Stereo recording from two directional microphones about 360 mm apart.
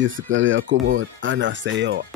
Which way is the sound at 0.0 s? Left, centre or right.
Right.